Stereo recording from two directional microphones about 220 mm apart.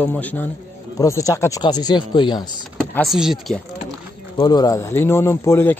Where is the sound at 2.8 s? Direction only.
5° left (ahead or behind).